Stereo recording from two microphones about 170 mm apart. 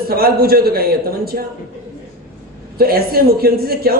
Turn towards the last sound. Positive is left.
turn(degrees=-65)  # may be behind; listen again after turning